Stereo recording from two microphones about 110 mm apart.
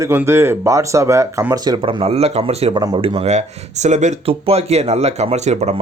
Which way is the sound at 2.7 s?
45° right (ahead or behind).